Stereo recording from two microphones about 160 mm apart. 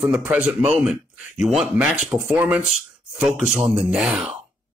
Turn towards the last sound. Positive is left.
turn(degrees=0)  # may be behind; listen again after turning